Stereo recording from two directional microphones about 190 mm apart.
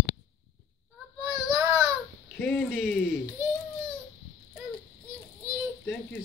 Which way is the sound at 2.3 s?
5° left (ahead or behind).